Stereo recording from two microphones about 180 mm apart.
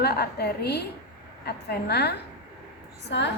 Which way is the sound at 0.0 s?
60° left (ahead or behind).